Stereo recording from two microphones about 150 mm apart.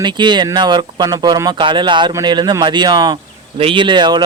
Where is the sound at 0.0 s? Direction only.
30° right (ahead or behind).